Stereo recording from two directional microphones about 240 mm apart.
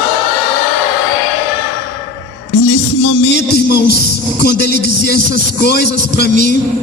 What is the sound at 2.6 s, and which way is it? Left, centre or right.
Music, left.